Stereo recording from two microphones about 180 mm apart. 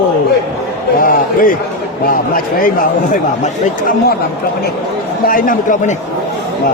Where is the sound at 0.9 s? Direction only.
50° left (ahead or behind).